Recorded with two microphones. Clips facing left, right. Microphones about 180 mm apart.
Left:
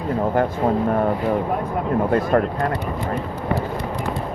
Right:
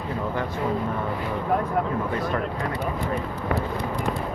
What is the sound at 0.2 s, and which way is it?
Speech, 50° left (ahead or behind).